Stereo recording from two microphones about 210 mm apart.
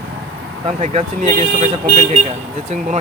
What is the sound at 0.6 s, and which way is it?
Speech, 30° right (ahead or behind).